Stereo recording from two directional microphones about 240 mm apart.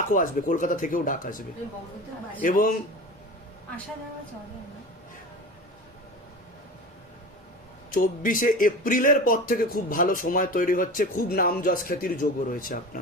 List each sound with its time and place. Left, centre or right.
0.1 s speech: left
2.4 s speech: left
7.9 s speech: left